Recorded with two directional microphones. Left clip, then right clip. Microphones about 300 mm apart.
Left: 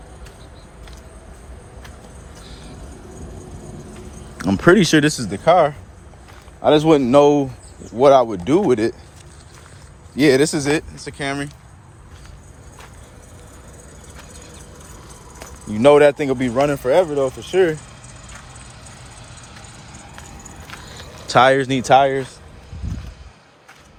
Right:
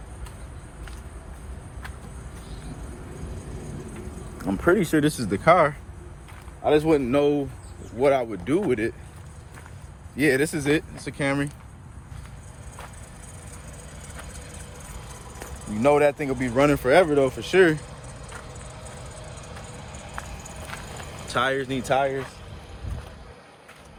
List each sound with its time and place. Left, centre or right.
4.4 s speech: left
5.0 s speech: centre
6.6 s speech: left
10.2 s speech: centre
11.0 s speech: centre
15.8 s speech: left
16.6 s speech: centre
19.2 s a sound: centre
21.3 s speech: centre